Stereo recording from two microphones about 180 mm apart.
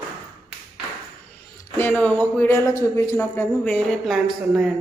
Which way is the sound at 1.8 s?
10° left (ahead or behind).